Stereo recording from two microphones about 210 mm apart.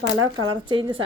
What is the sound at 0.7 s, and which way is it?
Speech, 25° right (ahead or behind).